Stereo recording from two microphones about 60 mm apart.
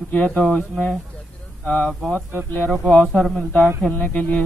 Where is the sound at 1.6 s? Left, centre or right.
Left.